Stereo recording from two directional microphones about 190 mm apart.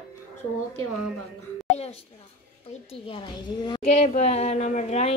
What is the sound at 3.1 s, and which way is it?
Speech, 25° left (ahead or behind).